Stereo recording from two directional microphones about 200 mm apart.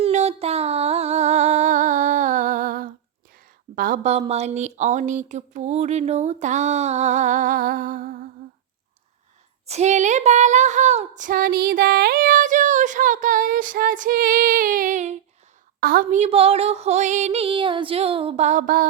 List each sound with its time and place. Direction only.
0.0 s a sound: 30° right (ahead or behind)
3.8 s speech: 45° right (ahead or behind)
9.6 s speech: 35° right (ahead or behind)